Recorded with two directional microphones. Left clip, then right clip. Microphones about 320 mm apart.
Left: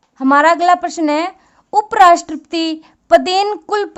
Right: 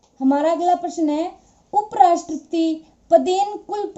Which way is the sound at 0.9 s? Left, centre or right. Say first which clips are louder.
Left 5 dB; left.